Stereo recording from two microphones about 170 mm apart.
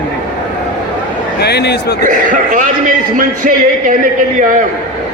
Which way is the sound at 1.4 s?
75° left (ahead or behind).